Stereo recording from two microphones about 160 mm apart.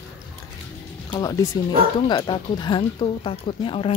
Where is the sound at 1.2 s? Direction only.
20° left (ahead or behind).